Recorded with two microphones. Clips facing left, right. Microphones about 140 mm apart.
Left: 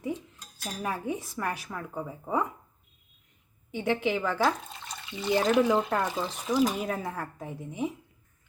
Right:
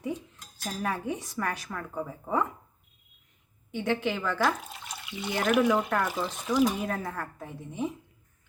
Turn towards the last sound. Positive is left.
turn(degrees=10)  # may be behind; listen again after turning